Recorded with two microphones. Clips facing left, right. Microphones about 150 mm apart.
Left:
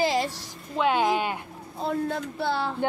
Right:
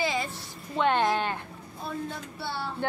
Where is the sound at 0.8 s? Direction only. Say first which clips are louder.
Left 2 dB; 5° left (ahead or behind).